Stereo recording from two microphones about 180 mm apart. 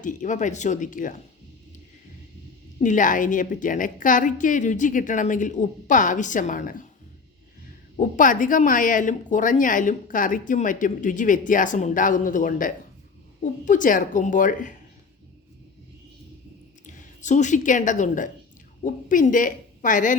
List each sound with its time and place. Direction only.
0.0 s speech: 45° left (ahead or behind)
2.8 s speech: 45° left (ahead or behind)
7.9 s speech: 45° left (ahead or behind)
16.8 s a woman's voice: 45° left (ahead or behind)